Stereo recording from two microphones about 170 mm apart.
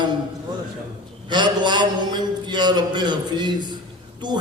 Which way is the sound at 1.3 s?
25° right (ahead or behind).